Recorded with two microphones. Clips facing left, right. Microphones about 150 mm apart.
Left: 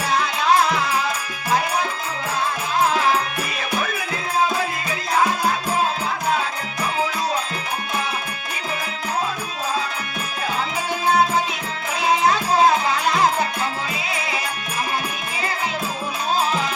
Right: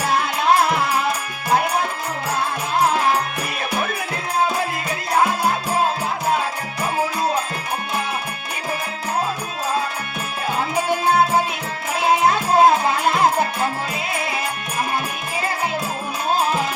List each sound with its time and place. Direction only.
0.1 s music: 55° right (ahead or behind)
12.0 s music: 55° right (ahead or behind)